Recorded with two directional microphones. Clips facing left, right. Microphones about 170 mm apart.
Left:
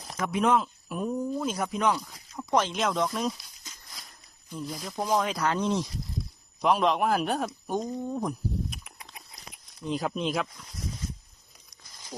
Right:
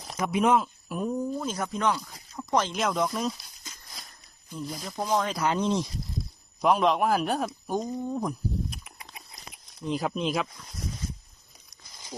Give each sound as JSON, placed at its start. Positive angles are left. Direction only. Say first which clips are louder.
{"t": 0.2, "sound": "speech", "louder": "right 1 dB", "side_deg": -10}
{"t": 4.5, "sound": "speech", "louder": "even", "side_deg": 0}
{"t": 5.4, "sound": "speech", "louder": "right 1 dB", "side_deg": -15}
{"t": 6.6, "sound": "speech", "louder": "right 1 dB", "side_deg": 0}